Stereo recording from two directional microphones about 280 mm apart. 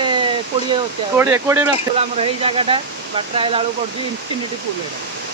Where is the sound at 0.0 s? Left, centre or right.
Centre.